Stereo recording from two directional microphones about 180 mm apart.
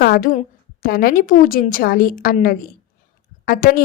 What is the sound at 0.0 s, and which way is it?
A woman's voice, 50° left (ahead or behind).